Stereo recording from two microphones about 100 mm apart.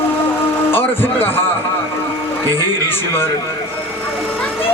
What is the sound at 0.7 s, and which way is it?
Speech, 20° left (ahead or behind).